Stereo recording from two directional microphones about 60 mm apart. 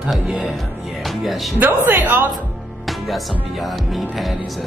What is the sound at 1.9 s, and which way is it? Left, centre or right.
Music, right.